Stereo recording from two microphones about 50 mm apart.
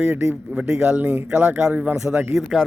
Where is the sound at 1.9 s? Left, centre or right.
Centre.